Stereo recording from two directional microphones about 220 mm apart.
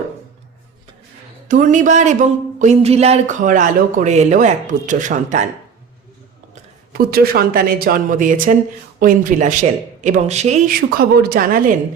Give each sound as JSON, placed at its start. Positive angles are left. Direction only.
{"t": 1.5, "sound": "speech", "side_deg": -35}
{"t": 6.5, "sound": "speech", "side_deg": -45}
{"t": 10.8, "sound": "a woman's voice", "side_deg": -45}